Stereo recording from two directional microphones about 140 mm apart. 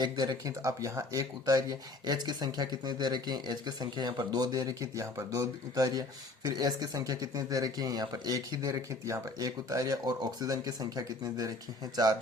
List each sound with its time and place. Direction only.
0.0 s speech: 30° right (ahead or behind)